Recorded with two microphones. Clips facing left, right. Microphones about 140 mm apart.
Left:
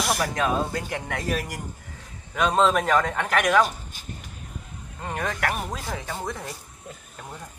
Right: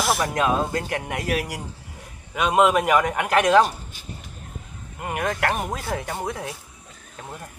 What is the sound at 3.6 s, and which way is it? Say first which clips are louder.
Speech: right 3 dB; 40° right (ahead or behind).